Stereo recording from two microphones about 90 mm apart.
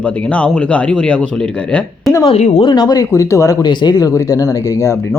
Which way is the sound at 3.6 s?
50° left (ahead or behind).